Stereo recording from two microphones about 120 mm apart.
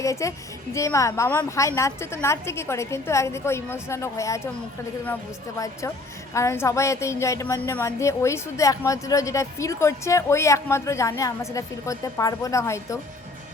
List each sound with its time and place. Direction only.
0.0 s speech: 25° left (ahead or behind)
5.5 s speech: 30° left (ahead or behind)